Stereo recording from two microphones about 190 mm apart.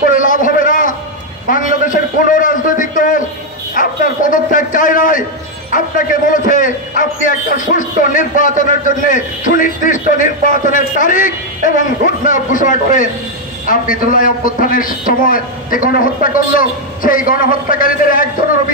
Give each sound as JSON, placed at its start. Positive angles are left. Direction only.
{"t": 0.1, "sound": "a sound", "side_deg": 45}
{"t": 3.7, "sound": "bow-wow", "side_deg": 45}
{"t": 5.7, "sound": "a man's voice", "side_deg": 45}